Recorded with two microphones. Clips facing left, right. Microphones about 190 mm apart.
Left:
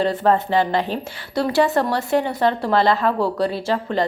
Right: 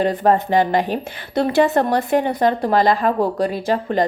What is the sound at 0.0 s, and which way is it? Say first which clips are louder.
A woman's voice: right 2 dB; 15° right (ahead or behind).